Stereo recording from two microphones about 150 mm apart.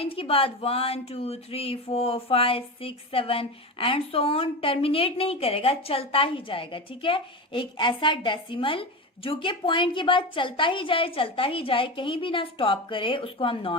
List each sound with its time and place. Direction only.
0.0 s speech: 40° left (ahead or behind)